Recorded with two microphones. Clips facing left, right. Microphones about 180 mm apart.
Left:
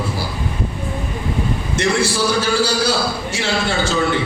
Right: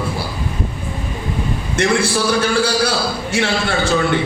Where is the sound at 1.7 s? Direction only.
55° right (ahead or behind).